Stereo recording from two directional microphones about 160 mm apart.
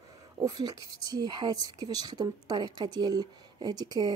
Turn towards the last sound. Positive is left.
turn(degrees=-25)  # may be behind; listen again after turning